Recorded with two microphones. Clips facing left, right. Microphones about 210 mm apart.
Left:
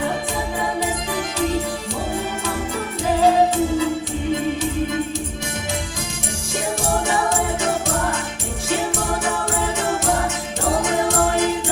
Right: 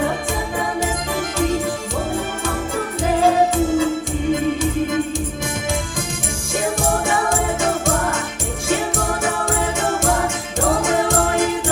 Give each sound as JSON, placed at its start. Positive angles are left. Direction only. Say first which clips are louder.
{"t": 3.2, "sound": "music", "louder": "even", "side_deg": -50}
{"t": 10.8, "sound": "music", "louder": "left 2 dB", "side_deg": -50}